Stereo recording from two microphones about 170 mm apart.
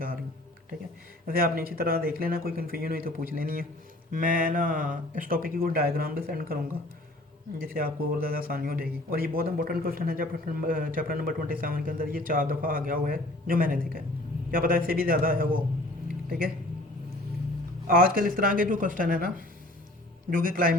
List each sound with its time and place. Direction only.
1.3 s speech: 60° right (ahead or behind)
7.6 s speech: 60° right (ahead or behind)
17.8 s a woman's voice: 55° right (ahead or behind)
20.3 s speech: 55° right (ahead or behind)